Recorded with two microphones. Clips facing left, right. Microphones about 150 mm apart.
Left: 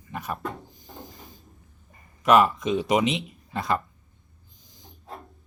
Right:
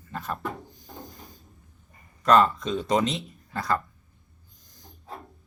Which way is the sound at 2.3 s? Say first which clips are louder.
Left 1 dB; 10° left (ahead or behind).